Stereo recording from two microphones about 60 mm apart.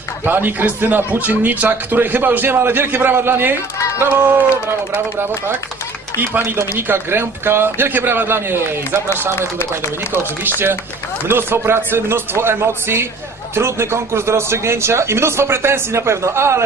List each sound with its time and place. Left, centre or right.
0.3 s a man's voice: right
6.1 s a man's voice: right